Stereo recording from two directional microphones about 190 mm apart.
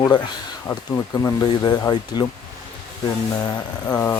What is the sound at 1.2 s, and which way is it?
Speech, 20° left (ahead or behind).